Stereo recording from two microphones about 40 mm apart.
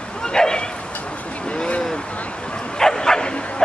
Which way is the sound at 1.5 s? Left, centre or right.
Left.